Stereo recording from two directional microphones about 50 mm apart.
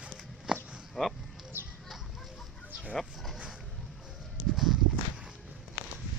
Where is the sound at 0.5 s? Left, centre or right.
Centre.